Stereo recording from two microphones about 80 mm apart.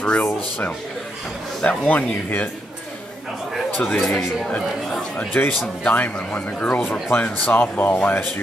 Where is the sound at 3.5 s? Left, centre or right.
Centre.